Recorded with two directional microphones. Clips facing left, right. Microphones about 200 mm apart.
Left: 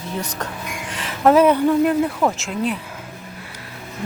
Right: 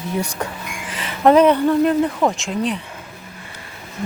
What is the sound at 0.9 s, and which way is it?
Speech, centre (ahead or behind).